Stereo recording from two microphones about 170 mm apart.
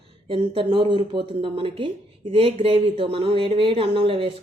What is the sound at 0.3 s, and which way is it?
Speech, 30° right (ahead or behind).